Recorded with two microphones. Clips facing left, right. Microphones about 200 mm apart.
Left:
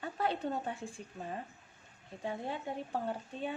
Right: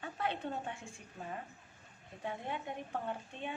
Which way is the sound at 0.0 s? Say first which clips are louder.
Left 4 dB; 40° left (ahead or behind).